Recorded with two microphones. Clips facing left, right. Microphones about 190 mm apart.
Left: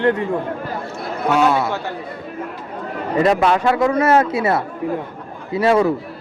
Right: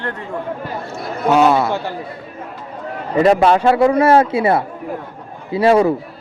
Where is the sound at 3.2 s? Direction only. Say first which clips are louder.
Right 4 dB; 30° right (ahead or behind).